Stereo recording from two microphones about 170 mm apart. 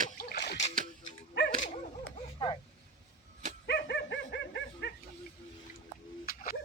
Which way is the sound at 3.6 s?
75° left (ahead or behind).